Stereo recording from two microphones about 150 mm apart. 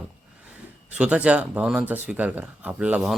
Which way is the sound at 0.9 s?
5° right (ahead or behind).